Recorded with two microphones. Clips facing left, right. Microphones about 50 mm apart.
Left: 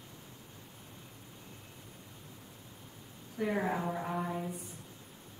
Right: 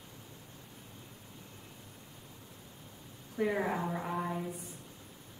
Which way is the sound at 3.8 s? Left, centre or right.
Centre.